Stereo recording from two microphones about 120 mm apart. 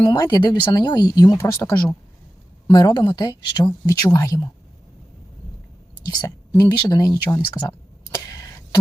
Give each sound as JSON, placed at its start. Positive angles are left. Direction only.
{"t": 0.0, "sound": "speech", "side_deg": 35}
{"t": 6.1, "sound": "speech", "side_deg": 35}
{"t": 6.8, "sound": "speech", "side_deg": 25}
{"t": 8.1, "sound": "a sound", "side_deg": 30}